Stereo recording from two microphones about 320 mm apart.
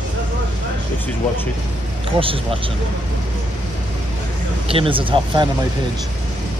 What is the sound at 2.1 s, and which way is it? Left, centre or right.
Speech, centre.